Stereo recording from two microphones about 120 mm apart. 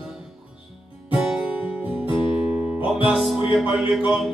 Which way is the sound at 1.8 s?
45° left (ahead or behind).